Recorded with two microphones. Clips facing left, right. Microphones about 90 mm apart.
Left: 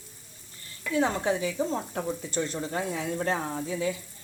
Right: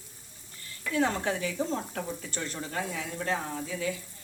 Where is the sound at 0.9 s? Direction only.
20° left (ahead or behind).